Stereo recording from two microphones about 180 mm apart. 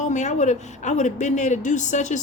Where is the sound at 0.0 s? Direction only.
40° left (ahead or behind).